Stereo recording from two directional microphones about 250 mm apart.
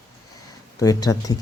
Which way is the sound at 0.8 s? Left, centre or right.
Centre.